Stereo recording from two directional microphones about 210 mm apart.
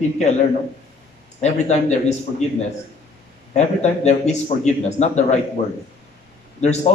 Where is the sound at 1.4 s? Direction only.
30° left (ahead or behind).